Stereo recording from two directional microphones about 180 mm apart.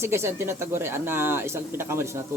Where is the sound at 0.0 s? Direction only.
15° right (ahead or behind).